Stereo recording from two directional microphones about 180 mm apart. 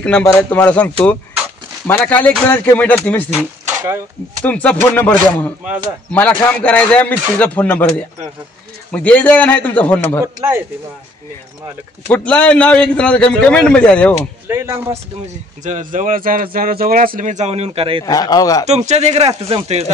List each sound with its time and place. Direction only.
0.0 s a man's voice: 5° left (ahead or behind)
4.5 s a man's voice: 10° left (ahead or behind)
8.9 s a man's voice: 10° left (ahead or behind)
10.2 s speech: 15° right (ahead or behind)
12.1 s a man's voice: 5° left (ahead or behind)
14.5 s speech: 15° right (ahead or behind)
15.6 s speech: 45° right (ahead or behind)
18.0 s a man's voice: 20° left (ahead or behind)
18.7 s speech: 40° right (ahead or behind)